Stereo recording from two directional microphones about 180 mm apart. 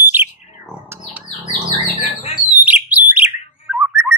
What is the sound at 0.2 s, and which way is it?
Bird, 10° right (ahead or behind).